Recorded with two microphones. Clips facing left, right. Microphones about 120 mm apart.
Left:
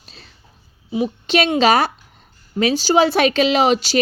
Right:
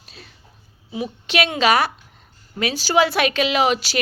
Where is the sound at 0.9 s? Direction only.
25° left (ahead or behind).